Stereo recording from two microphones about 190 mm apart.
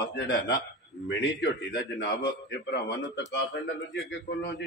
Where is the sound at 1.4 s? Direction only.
65° left (ahead or behind).